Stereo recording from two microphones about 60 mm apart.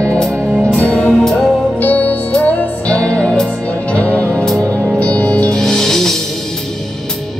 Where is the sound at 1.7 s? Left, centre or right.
Left.